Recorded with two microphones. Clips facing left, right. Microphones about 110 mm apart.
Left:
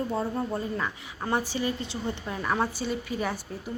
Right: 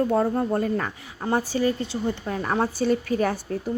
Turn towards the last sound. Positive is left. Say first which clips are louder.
# right 7 dB
turn(degrees=-50)  # may be behind; listen again after turning